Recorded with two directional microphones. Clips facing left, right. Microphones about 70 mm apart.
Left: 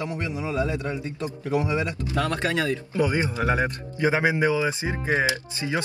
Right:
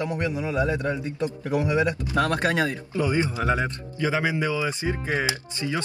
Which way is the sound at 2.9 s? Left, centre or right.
Left.